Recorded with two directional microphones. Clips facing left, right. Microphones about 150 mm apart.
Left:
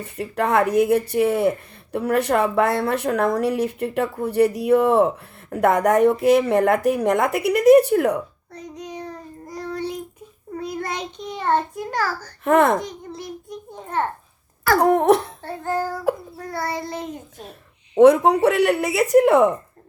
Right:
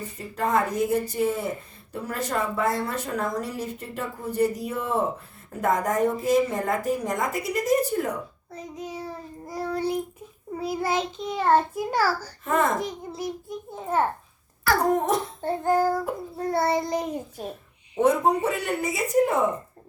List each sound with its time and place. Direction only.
0.0 s speech: 65° left (ahead or behind)
8.5 s child singing: 5° right (ahead or behind)
10.6 s a child's voice: 5° right (ahead or behind)
11.8 s child singing: 10° right (ahead or behind)
12.5 s speech: 70° left (ahead or behind)
12.8 s a child's voice: 5° right (ahead or behind)
14.8 s speech: 70° left (ahead or behind)
15.4 s child singing: 15° right (ahead or behind)
16.4 s child singing: 25° right (ahead or behind)
17.9 s speech: 80° left